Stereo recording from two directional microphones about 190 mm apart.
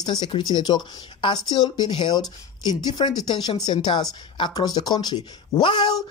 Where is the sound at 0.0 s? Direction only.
25° left (ahead or behind).